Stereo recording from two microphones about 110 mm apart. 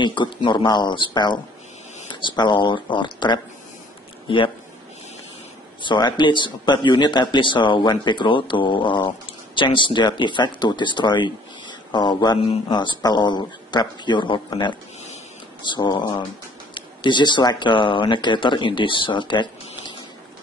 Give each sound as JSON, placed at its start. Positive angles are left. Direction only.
{"t": 0.0, "sound": "speech", "side_deg": 45}
{"t": 5.8, "sound": "speech", "side_deg": 45}